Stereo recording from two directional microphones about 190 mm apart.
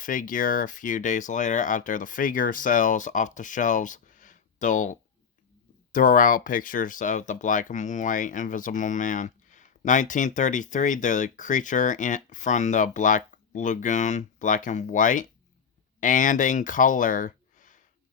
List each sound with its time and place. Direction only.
0.0 s speech: 45° left (ahead or behind)